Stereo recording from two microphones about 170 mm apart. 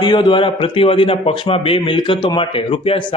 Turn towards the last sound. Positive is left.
turn(degrees=30)  # may be behind; listen again after turning